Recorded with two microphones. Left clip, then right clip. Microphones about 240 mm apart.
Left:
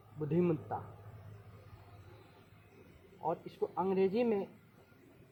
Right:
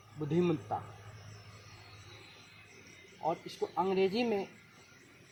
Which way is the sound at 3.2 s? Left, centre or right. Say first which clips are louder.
Right 2 dB; right.